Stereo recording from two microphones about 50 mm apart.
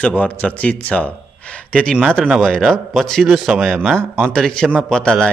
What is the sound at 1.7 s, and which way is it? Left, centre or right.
Speech, left.